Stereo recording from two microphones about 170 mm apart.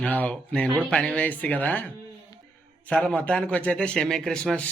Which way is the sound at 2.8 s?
5° left (ahead or behind).